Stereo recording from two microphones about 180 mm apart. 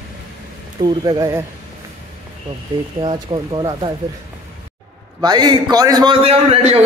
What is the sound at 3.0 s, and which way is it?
Speech, 25° right (ahead or behind).